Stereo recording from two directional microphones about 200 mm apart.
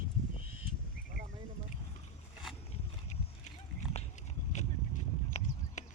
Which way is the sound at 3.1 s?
30° left (ahead or behind).